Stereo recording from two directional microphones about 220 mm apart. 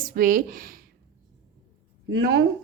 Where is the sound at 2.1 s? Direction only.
50° right (ahead or behind).